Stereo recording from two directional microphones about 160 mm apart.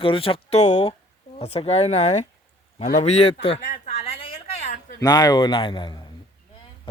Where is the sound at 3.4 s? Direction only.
40° left (ahead or behind).